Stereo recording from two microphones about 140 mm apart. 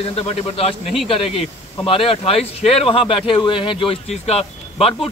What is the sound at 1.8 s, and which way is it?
Speech, 40° left (ahead or behind).